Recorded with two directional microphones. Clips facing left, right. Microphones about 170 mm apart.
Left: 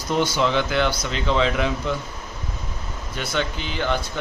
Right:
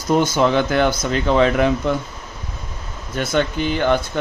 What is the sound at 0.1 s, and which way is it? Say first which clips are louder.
Speech: right 5 dB; 45° right (ahead or behind).